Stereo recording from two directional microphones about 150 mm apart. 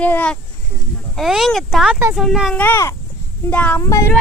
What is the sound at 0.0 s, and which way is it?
Speech, 10° left (ahead or behind).